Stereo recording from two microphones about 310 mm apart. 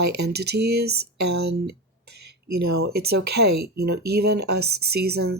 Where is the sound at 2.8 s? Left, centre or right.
Right.